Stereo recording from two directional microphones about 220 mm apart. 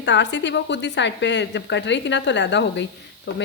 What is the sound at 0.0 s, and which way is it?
A woman's voice, 55° left (ahead or behind).